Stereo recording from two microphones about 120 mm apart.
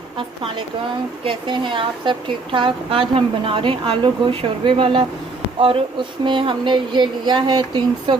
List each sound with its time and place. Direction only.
0.2 s a woman's voice: 45° right (ahead or behind)
6.2 s speech: 45° right (ahead or behind)